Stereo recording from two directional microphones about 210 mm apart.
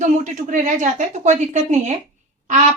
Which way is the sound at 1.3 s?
35° right (ahead or behind).